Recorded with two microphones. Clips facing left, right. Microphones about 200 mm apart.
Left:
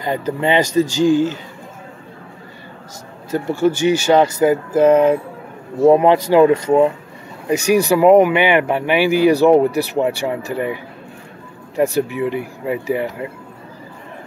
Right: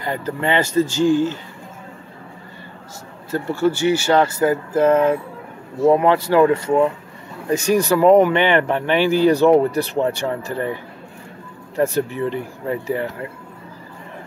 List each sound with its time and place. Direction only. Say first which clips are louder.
0.0 s speech: left 4 dB; 20° left (ahead or behind)
3.3 s speech: left 2 dB; 15° left (ahead or behind)